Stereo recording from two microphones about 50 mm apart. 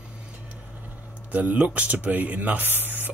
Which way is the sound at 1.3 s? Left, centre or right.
Right.